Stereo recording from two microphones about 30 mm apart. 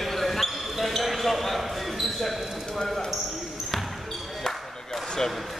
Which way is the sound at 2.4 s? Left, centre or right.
Centre.